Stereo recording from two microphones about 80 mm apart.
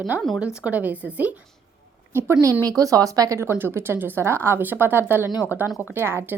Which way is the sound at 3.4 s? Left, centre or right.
Right.